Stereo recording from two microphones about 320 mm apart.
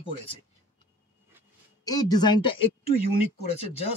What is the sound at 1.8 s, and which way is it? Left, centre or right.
Speech, centre.